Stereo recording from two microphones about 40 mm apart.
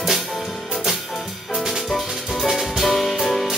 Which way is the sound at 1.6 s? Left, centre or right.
Centre.